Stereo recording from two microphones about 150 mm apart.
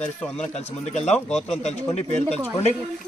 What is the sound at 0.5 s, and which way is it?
Speech, 45° left (ahead or behind).